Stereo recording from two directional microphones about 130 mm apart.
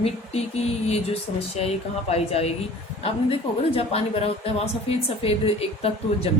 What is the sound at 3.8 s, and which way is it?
A woman's voice, 50° left (ahead or behind).